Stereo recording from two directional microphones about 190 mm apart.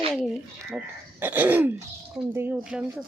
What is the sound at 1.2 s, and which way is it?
Speech, 10° right (ahead or behind).